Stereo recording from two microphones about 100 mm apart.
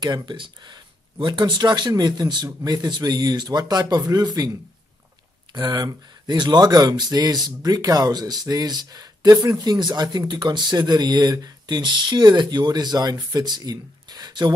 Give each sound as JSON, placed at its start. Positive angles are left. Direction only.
{"t": 0.0, "sound": "speech", "side_deg": -50}
{"t": 5.5, "sound": "speech", "side_deg": -45}